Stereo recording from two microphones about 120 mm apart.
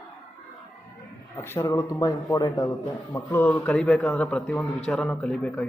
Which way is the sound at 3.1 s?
15° left (ahead or behind).